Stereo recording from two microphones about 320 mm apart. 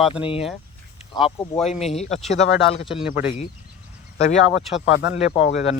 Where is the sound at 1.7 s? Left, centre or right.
Centre.